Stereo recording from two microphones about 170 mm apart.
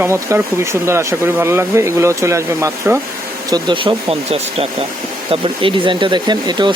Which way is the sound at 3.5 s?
30° right (ahead or behind).